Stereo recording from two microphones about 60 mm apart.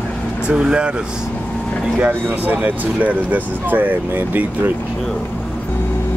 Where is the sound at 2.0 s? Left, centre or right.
Right.